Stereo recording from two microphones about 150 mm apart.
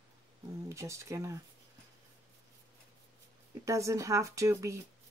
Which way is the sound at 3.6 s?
20° right (ahead or behind).